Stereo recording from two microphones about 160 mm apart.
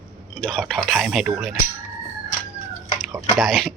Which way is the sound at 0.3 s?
5° left (ahead or behind).